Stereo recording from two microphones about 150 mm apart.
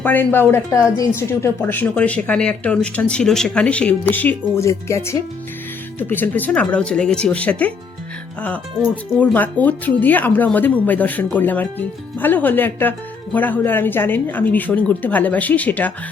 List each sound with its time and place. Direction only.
0.0 s speech: 10° left (ahead or behind)
9.1 s speech: 10° left (ahead or behind)